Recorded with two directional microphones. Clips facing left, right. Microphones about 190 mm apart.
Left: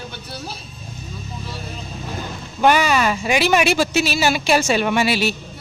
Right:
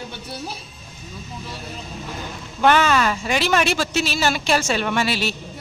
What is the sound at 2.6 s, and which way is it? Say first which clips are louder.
Speech: left 1 dB; 10° left (ahead or behind).